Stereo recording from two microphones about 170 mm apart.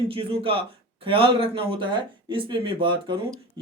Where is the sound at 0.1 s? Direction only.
30° right (ahead or behind).